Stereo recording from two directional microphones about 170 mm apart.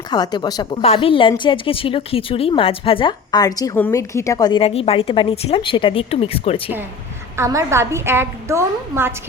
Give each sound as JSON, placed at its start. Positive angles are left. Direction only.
{"t": 0.1, "sound": "a woman's voice", "side_deg": 25}
{"t": 4.6, "sound": "a woman's voice", "side_deg": 35}
{"t": 7.3, "sound": "a woman's voice", "side_deg": -15}